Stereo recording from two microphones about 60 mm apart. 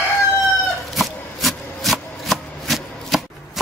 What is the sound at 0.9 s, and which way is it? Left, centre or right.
Rub, centre.